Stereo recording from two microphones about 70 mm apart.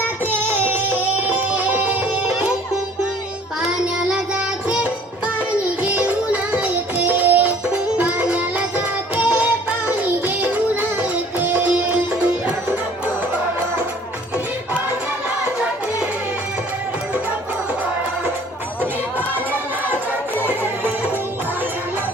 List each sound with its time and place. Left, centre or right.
0.3 s music: right
5.8 s music: right